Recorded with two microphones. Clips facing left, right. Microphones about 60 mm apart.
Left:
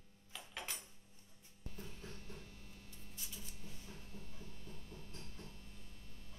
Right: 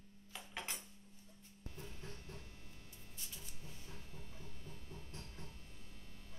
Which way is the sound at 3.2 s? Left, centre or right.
Centre.